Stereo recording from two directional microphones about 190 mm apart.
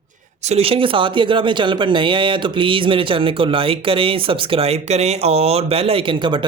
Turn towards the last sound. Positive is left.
turn(degrees=-25)  # may be behind; listen again after turning